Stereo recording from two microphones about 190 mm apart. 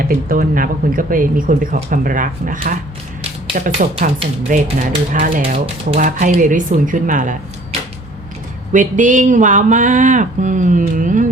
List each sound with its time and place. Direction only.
0.0 s speech: 50° right (ahead or behind)
8.7 s speech: 40° right (ahead or behind)